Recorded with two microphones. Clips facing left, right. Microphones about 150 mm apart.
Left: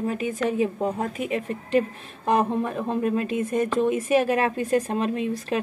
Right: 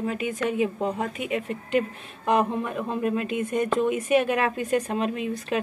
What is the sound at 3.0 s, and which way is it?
A woman's voice, 35° left (ahead or behind).